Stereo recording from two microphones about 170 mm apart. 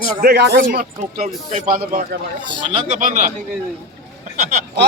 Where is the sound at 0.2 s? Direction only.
65° right (ahead or behind).